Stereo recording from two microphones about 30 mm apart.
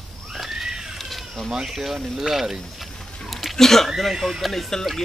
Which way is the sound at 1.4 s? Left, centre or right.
Right.